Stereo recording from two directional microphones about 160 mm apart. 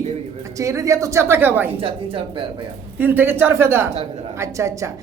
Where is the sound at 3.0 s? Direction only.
10° right (ahead or behind).